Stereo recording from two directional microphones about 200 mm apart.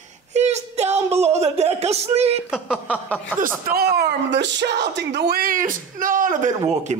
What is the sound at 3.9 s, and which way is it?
Speech, 60° right (ahead or behind).